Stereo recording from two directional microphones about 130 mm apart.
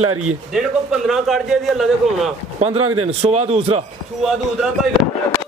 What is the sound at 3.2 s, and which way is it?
Speech, 55° right (ahead or behind).